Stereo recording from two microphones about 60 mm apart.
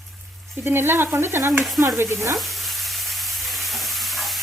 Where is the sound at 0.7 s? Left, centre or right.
Right.